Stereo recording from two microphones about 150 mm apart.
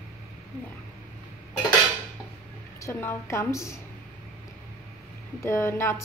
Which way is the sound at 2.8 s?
15° left (ahead or behind).